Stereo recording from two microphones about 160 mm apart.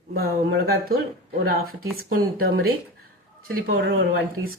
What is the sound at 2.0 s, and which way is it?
Speech, 70° right (ahead or behind).